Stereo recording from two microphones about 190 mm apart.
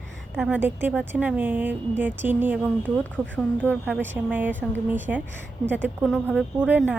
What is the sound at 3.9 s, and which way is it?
A woman's voice, 5° right (ahead or behind).